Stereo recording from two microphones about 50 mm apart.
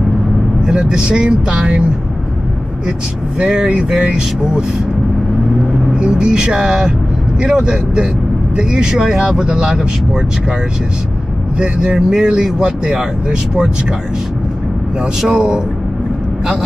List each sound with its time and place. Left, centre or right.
0.7 s speech: centre
3.3 s speech: centre
5.9 s speech: centre
11.5 s speech: centre
15.3 s speech: centre